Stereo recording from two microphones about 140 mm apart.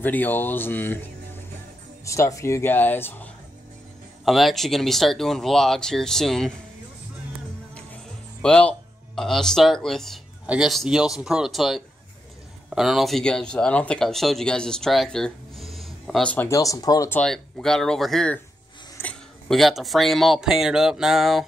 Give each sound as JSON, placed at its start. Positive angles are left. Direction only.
{"t": 0.0, "sound": "speech", "side_deg": 15}
{"t": 2.0, "sound": "speech", "side_deg": 20}
{"t": 4.2, "sound": "speech", "side_deg": 0}
{"t": 8.4, "sound": "speech", "side_deg": 5}
{"t": 16.4, "sound": "speech", "side_deg": 25}
{"t": 17.1, "sound": "speech", "side_deg": 5}
{"t": 18.9, "sound": "a sound", "side_deg": 15}
{"t": 19.5, "sound": "speech", "side_deg": 0}